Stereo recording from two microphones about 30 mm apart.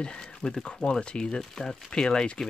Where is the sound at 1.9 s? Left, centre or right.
Left.